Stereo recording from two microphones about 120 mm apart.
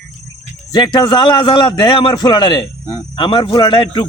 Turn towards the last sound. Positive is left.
turn(degrees=35)  # may be behind; listen again after turning